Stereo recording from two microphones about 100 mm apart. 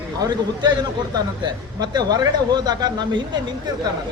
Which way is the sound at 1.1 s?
45° right (ahead or behind).